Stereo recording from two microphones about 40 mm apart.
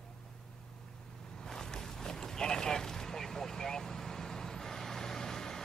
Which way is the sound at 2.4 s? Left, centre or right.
Centre.